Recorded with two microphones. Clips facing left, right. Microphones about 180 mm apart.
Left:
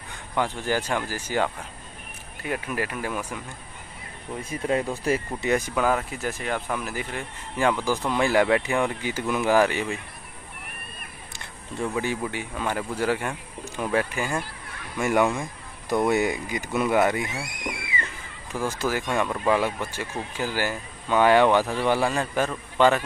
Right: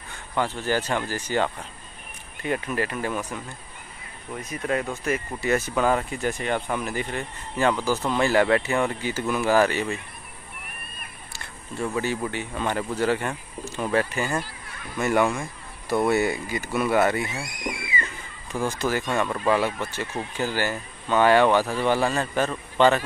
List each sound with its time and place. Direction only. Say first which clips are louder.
0.4 s speech: right 1 dB; 15° left (ahead or behind)
4.4 s speech: left 1 dB; 30° left (ahead or behind)
5.4 s speech: right 4 dB; 15° left (ahead or behind)
11.9 s speech: right 2 dB; 15° left (ahead or behind)
18.7 s speech: even; 5° left (ahead or behind)